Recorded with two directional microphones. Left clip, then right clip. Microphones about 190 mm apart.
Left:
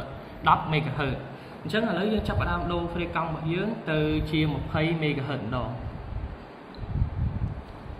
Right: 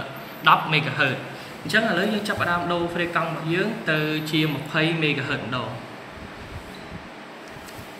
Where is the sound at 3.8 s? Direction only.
60° left (ahead or behind).